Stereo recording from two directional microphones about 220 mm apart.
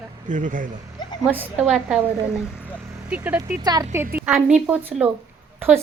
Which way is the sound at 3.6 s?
15° right (ahead or behind).